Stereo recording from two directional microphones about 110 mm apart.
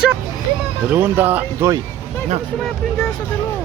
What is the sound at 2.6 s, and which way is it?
Speech, 5° left (ahead or behind).